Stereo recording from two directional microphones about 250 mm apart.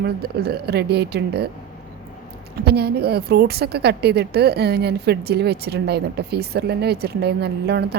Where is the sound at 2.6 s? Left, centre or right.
Right.